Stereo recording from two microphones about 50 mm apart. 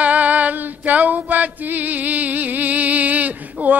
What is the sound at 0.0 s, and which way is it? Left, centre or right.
Female singing, right.